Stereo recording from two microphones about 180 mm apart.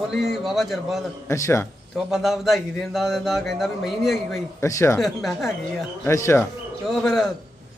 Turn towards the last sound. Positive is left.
turn(degrees=0)  # may be behind; listen again after turning